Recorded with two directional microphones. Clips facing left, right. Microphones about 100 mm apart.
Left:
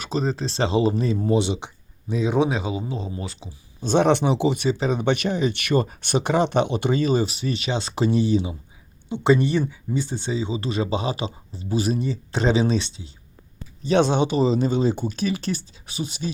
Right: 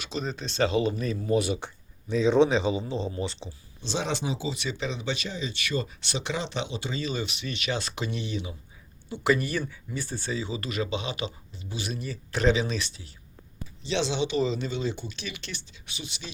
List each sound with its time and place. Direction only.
0.0 s speech: 40° left (ahead or behind); by 3.5 s 5° left (ahead or behind)
3.8 s speech: 55° left (ahead or behind)
4.5 s speech: 40° left (ahead or behind)
4.9 s speech: 60° left (ahead or behind); by 12.0 s 40° left (ahead or behind)
12.0 s speech: 25° left (ahead or behind)
13.8 s speech: 50° left (ahead or behind)